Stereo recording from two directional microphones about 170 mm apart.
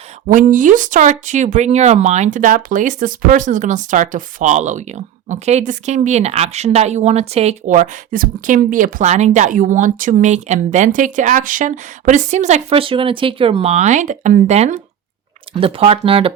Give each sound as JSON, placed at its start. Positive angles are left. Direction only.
{"t": 0.3, "sound": "speech", "side_deg": -50}